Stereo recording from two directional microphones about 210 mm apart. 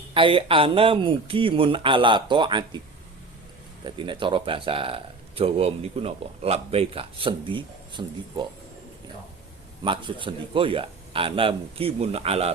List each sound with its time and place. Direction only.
0.1 s a man's voice: 25° right (ahead or behind)
3.8 s a man's voice: 20° right (ahead or behind)
9.8 s a man's voice: 25° right (ahead or behind)